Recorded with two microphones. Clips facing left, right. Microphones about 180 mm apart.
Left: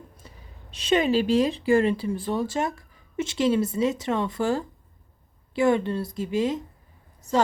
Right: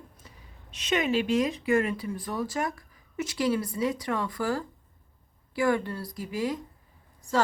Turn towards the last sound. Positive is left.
turn(degrees=20)  # may be behind; listen again after turning